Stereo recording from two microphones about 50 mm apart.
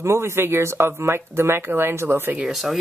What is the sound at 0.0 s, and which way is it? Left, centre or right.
Speech, right.